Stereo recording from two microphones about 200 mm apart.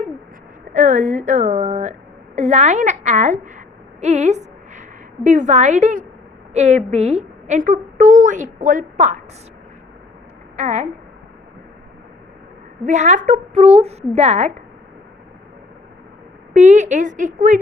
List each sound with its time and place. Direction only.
0.7 s a woman's voice: 40° right (ahead or behind)
10.6 s a woman's voice: 35° right (ahead or behind)
12.8 s a woman's voice: 35° right (ahead or behind)
16.6 s a woman's voice: 35° right (ahead or behind)